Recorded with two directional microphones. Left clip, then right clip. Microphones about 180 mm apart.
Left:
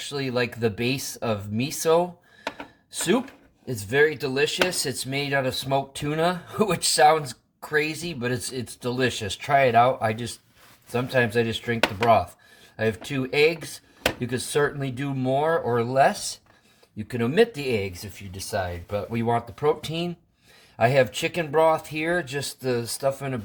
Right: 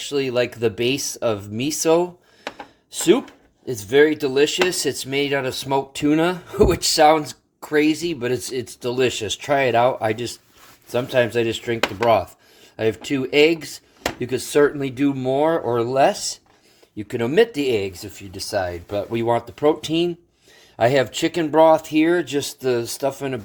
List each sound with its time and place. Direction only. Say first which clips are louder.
0.1 s speech: right 6 dB; 30° right (ahead or behind)